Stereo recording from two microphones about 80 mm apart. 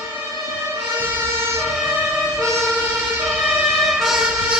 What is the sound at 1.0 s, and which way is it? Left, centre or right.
Emergency vehicle, right.